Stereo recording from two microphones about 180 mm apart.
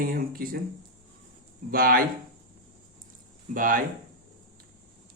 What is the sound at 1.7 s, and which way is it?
Speech, 55° right (ahead or behind).